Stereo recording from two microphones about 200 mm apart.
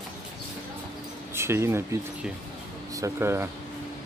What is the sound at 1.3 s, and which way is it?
Speech, 15° right (ahead or behind).